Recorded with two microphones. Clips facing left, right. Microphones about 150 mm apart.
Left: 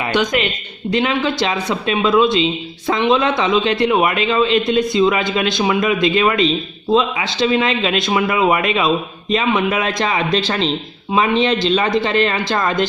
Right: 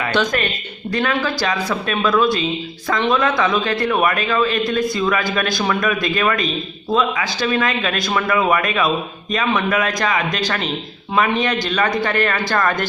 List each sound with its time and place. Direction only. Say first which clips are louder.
0.1 s speech: left 3 dB; 15° left (ahead or behind)